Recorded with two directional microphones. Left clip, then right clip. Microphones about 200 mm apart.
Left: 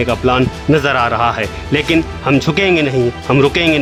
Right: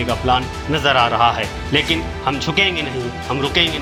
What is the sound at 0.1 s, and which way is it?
Speech, 25° left (ahead or behind).